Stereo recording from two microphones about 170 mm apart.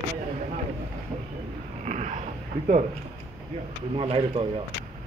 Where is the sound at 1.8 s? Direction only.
45° right (ahead or behind).